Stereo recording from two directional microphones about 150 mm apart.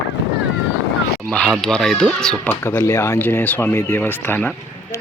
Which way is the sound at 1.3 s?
5° left (ahead or behind).